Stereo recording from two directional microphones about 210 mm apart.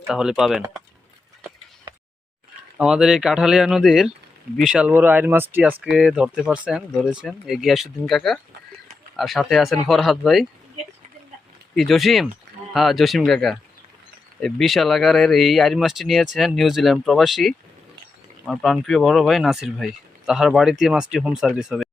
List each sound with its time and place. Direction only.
0.1 s speech: 5° right (ahead or behind)
1.9 s a sound: 20° right (ahead or behind)
2.7 s speech: 5° right (ahead or behind)
11.7 s speech: centre (ahead or behind)